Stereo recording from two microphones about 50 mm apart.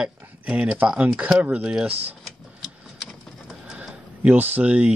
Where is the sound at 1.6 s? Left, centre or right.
Centre.